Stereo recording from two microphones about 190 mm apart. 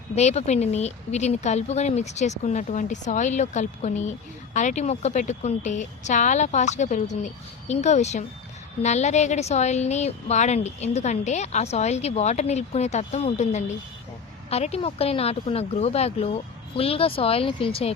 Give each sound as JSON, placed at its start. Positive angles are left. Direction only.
{"t": 0.2, "sound": "a woman's voice", "side_deg": 35}